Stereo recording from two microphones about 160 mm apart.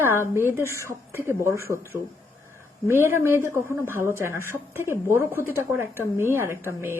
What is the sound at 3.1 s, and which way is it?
A woman's voice, 15° right (ahead or behind).